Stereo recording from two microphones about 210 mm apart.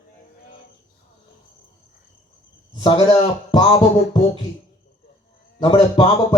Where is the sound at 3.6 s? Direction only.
25° left (ahead or behind).